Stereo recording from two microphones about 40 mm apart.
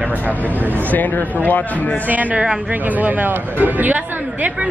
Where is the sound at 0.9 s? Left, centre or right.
Left.